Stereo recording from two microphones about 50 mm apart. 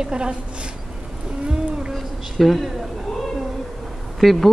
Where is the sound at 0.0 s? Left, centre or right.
Centre.